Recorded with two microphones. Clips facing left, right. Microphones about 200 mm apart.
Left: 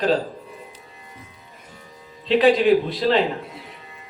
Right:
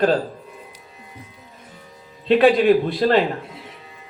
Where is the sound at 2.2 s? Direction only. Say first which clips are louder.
Right 2 dB; 55° right (ahead or behind).